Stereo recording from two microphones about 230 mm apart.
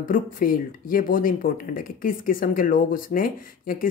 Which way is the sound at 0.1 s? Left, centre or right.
Left.